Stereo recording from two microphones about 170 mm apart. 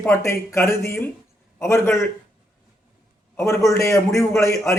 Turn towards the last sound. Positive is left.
turn(degrees=15)  # may be behind; listen again after turning